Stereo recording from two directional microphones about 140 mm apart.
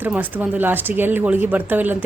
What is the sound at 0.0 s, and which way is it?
Speech, 10° right (ahead or behind).